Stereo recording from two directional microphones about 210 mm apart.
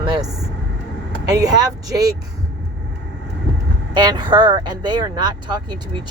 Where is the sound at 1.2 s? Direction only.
15° right (ahead or behind).